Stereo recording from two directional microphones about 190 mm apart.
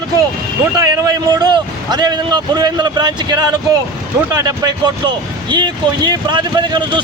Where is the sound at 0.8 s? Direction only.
20° right (ahead or behind).